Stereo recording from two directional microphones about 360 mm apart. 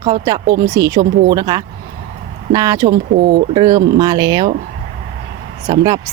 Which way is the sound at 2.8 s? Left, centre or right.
Right.